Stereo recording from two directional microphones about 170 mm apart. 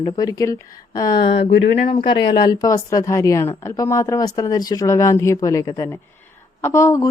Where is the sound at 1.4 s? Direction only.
90° left.